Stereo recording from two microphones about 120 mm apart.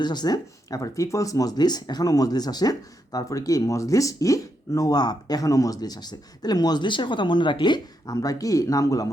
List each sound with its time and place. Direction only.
0.0 s speech: 35° left (ahead or behind)